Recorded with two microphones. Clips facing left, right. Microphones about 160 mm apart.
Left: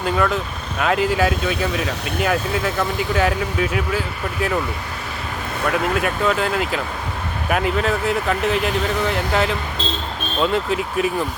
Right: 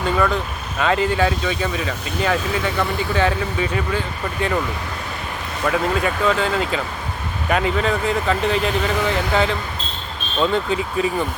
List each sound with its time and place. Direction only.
0.8 s speech: 5° left (ahead or behind)
5.6 s speech: centre (ahead or behind)